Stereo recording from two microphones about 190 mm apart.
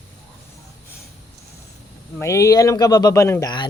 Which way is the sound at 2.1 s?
15° left (ahead or behind).